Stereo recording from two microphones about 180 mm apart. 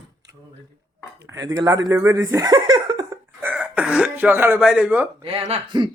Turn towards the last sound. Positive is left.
turn(degrees=-35)  # may be behind; listen again after turning